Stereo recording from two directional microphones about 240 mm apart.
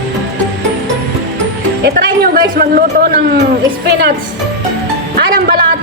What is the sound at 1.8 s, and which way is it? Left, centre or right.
Speech, right.